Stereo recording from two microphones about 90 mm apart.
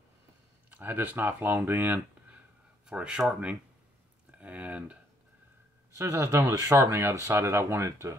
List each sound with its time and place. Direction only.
0.7 s speech: 20° right (ahead or behind)
2.9 s speech: 10° right (ahead or behind)
4.3 s a sound: 15° right (ahead or behind)
5.9 s speech: 35° right (ahead or behind)